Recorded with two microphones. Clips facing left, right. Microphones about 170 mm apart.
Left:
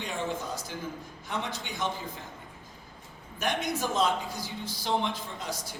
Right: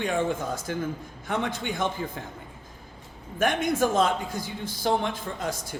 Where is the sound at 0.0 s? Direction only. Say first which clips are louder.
Right 7 dB; 55° right (ahead or behind).